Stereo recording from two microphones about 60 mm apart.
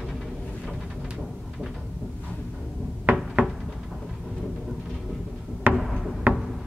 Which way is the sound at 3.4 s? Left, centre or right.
Right.